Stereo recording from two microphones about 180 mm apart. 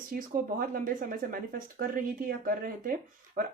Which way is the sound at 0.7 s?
50° right (ahead or behind).